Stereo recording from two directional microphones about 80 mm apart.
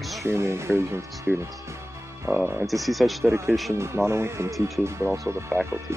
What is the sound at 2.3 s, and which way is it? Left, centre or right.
Speech, right.